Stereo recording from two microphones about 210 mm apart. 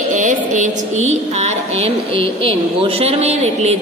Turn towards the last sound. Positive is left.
turn(degrees=-30)  # may be behind; listen again after turning